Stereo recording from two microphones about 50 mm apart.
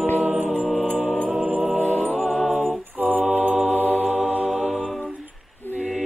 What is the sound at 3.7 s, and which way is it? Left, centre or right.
Music, left.